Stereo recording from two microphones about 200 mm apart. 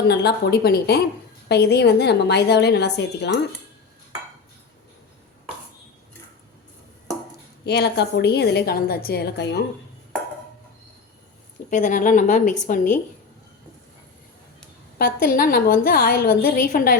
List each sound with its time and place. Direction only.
0.0 s a woman's voice: 55° left (ahead or behind)
7.6 s a woman's voice: 55° left (ahead or behind)
11.7 s a woman's voice: 40° left (ahead or behind)
14.9 s a woman's voice: 45° left (ahead or behind)